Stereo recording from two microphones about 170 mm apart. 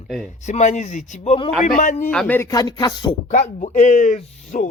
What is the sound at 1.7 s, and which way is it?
Speech, 50° left (ahead or behind).